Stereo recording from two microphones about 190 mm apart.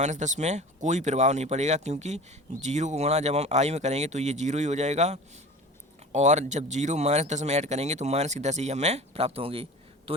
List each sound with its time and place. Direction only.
0.0 s a man's voice: 40° right (ahead or behind)